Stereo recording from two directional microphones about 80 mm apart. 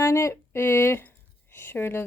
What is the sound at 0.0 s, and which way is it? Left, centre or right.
Speech, left.